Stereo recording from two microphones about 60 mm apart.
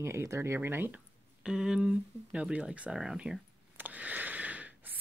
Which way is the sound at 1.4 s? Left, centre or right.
Centre.